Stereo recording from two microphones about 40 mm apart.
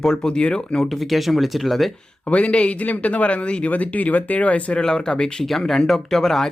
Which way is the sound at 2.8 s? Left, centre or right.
Left.